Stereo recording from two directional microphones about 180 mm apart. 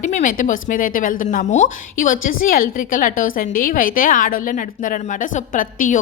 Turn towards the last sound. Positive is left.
turn(degrees=45)  # may be behind; listen again after turning